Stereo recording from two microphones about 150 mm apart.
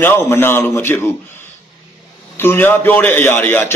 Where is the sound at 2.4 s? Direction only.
15° left (ahead or behind).